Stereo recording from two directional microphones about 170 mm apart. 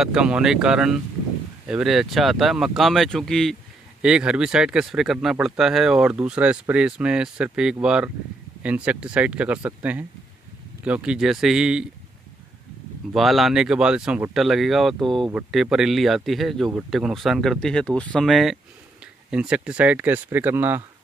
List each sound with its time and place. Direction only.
0.0 s speech: 5° right (ahead or behind)
13.1 s speech: centre (ahead or behind)